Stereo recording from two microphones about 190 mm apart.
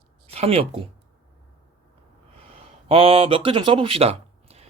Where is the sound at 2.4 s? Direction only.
30° right (ahead or behind).